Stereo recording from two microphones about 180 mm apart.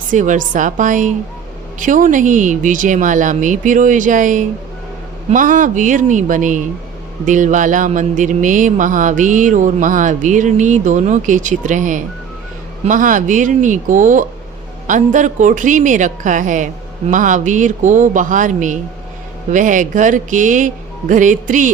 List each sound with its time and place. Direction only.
0.1 s speech: 45° right (ahead or behind)